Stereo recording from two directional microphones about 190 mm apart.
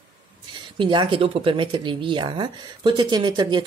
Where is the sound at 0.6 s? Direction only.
25° right (ahead or behind).